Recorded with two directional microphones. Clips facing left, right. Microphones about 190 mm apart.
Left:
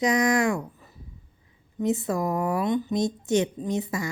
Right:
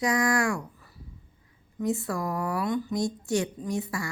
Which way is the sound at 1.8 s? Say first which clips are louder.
Left 4 dB; 20° left (ahead or behind).